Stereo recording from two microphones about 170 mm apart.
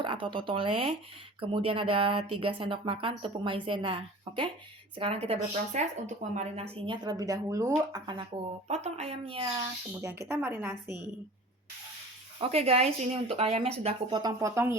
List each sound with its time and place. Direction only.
0.0 s speech: 30° right (ahead or behind)
8.6 s speech: 40° right (ahead or behind)
10.0 s a woman's voice: 15° right (ahead or behind)
12.4 s speech: 35° right (ahead or behind); by 14.8 s 15° right (ahead or behind)